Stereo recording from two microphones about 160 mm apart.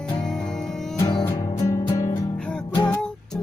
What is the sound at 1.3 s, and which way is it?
Music, 20° left (ahead or behind).